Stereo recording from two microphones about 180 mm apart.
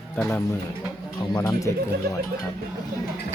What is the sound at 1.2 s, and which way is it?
Speech, 20° left (ahead or behind).